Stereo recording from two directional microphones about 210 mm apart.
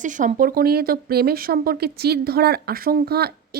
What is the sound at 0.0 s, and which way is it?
Speech, 35° right (ahead or behind).